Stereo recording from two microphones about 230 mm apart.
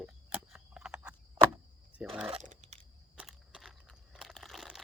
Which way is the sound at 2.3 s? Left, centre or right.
Right.